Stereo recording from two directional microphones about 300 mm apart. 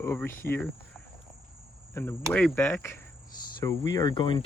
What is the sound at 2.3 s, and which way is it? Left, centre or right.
Speech, centre.